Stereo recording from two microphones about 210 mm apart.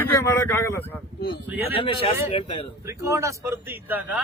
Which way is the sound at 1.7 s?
25° left (ahead or behind).